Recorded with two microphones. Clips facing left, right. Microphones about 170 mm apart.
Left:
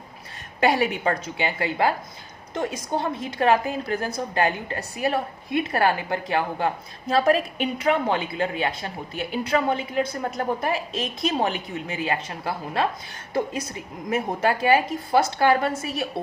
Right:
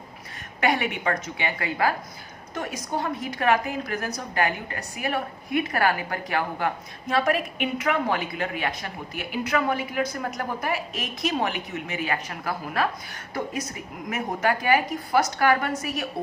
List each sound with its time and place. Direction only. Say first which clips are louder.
0.6 s a woman's voice: left 3 dB; 35° left (ahead or behind)